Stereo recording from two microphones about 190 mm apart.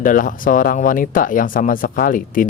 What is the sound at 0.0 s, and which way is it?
Speech, 45° left (ahead or behind).